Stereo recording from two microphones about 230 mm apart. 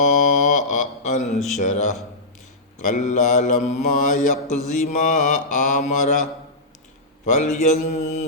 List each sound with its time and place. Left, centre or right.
0.0 s mantra: left
7.3 s mantra: left